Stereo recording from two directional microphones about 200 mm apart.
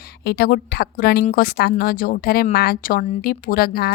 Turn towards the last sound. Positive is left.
turn(degrees=50)  # may be behind; listen again after turning